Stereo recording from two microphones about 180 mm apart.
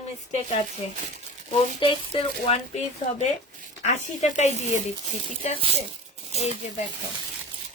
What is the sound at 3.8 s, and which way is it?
A woman's voice, 40° left (ahead or behind).